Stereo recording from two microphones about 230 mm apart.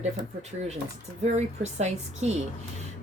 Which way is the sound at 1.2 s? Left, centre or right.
Right.